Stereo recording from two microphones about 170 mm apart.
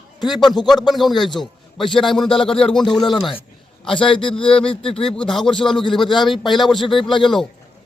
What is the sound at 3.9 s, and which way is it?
A man's voice, 30° left (ahead or behind).